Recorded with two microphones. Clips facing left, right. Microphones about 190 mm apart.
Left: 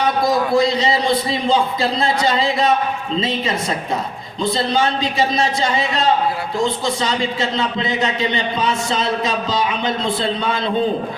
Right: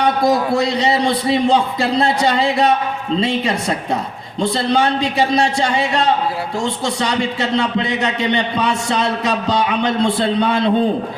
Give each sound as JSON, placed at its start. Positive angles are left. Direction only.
{"t": 0.3, "sound": "speech", "side_deg": -65}